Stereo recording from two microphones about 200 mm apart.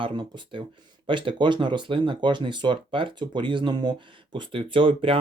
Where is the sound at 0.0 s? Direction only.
25° right (ahead or behind).